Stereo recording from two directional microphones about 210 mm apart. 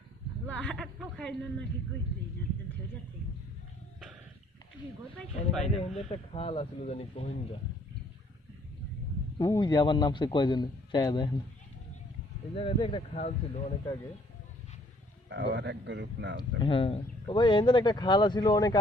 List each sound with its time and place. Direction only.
0.4 s a man's voice: 5° left (ahead or behind)
5.1 s a man's voice: 5° left (ahead or behind)
6.1 s speech: 25° left (ahead or behind)
9.4 s speech: 15° left (ahead or behind)
12.5 s speech: 25° left (ahead or behind)
15.3 s a man's voice: 55° right (ahead or behind)
16.4 s speech: 25° left (ahead or behind)